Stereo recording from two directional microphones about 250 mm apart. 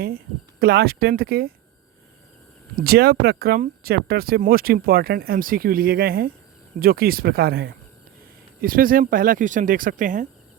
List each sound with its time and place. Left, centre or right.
0.6 s speech: right
2.7 s speech: right